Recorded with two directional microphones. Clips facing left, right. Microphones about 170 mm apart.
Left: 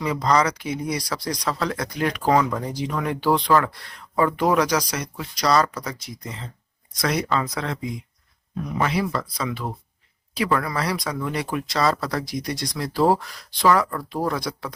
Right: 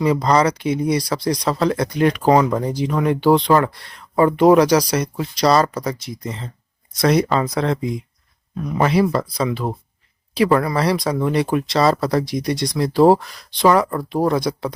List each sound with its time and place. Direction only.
0.0 s speech: 30° right (ahead or behind)
7.0 s speech: 30° right (ahead or behind)